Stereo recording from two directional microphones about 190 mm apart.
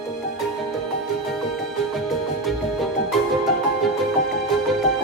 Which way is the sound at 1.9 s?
Centre (ahead or behind).